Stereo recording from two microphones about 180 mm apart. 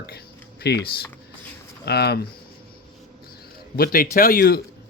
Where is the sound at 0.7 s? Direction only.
65° left (ahead or behind).